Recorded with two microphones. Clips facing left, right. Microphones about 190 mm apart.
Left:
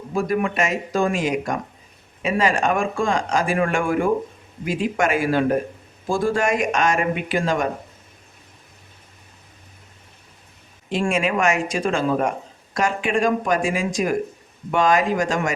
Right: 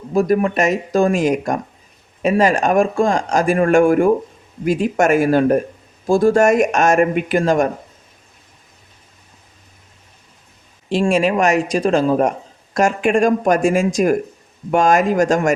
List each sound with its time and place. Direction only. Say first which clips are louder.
0.1 s speech: right 6 dB; 40° right (ahead or behind)
10.8 s speech: right 6 dB; 30° right (ahead or behind)